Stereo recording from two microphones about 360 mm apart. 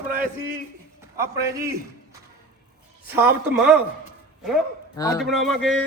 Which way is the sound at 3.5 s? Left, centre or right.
Centre.